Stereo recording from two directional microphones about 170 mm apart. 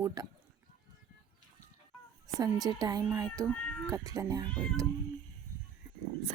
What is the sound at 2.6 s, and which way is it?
A child's voice, 25° right (ahead or behind).